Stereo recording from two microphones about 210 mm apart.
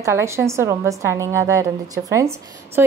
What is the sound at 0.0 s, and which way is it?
A woman's voice, 15° right (ahead or behind).